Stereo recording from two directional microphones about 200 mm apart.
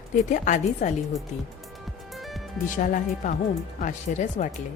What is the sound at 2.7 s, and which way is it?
A woman's voice, 40° left (ahead or behind).